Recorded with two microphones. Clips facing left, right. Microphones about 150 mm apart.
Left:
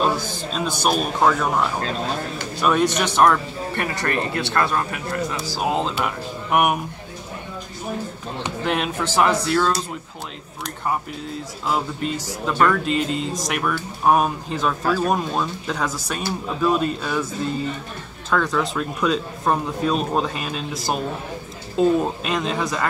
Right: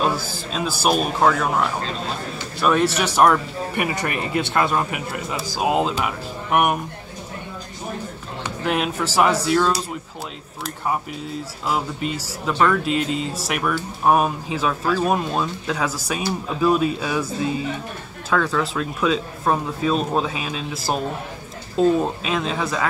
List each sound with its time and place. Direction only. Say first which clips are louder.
0.0 s a man's voice: left 1 dB; centre (ahead or behind)
8.6 s speech: right 1 dB; 5° right (ahead or behind)
11.6 s speech: even; 5° right (ahead or behind)